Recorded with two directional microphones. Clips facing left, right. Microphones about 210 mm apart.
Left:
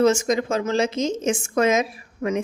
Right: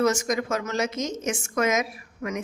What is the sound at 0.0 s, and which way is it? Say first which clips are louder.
A woman's voice: left 5 dB; 25° left (ahead or behind).